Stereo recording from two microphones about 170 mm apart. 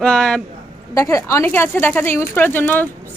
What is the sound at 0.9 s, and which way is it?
Speech, 15° left (ahead or behind).